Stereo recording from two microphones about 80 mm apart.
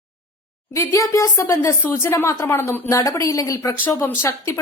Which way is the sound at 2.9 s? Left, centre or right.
Left.